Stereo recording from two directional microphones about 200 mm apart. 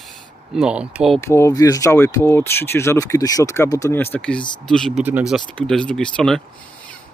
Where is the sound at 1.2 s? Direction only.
15° left (ahead or behind).